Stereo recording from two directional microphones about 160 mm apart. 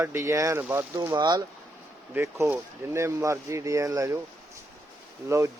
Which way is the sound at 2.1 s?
15° right (ahead or behind).